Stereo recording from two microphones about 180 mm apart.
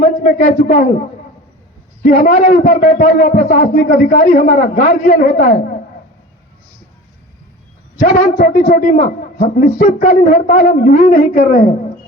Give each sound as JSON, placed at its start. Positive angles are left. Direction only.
{"t": 0.0, "sound": "a man's voice", "side_deg": 55}
{"t": 2.0, "sound": "a man's voice", "side_deg": 50}
{"t": 7.9, "sound": "a man's voice", "side_deg": 55}